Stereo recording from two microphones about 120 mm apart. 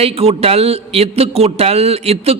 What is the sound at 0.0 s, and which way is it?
A man's voice, 55° right (ahead or behind).